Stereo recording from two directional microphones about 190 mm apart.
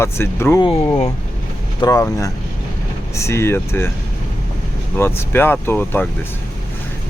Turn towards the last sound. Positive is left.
turn(degrees=10)  # may be behind; listen again after turning